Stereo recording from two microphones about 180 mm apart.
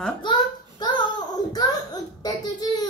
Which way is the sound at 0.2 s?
25° left (ahead or behind).